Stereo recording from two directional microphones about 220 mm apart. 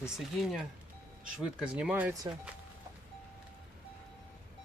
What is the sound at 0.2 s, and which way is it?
Speech, centre (ahead or behind).